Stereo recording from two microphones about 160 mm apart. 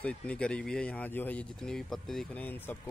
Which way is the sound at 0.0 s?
5° left (ahead or behind).